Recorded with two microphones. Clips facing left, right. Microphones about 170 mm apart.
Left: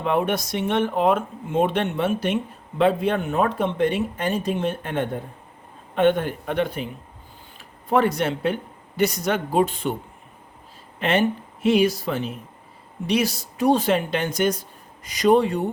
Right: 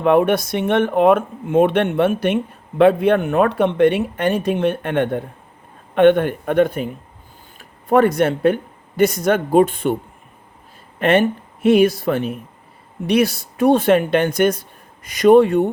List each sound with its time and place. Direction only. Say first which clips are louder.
0.0 s a man's voice: right 8 dB; 60° right (ahead or behind)
11.0 s speech: right 5 dB; 55° right (ahead or behind)